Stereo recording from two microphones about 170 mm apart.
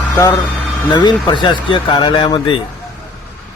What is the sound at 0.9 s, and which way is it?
Speech, 25° left (ahead or behind).